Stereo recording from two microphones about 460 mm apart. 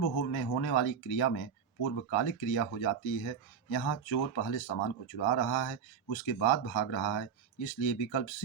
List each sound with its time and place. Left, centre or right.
0.0 s speech: left
0.3 s speech: left